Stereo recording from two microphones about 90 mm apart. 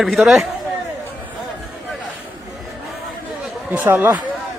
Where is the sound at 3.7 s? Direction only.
20° right (ahead or behind).